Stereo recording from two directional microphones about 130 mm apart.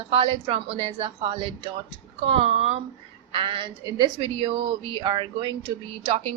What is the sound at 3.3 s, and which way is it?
A woman's voice, 40° right (ahead or behind).